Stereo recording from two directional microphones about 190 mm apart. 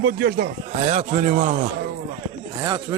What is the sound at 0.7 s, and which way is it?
Speech, 35° right (ahead or behind).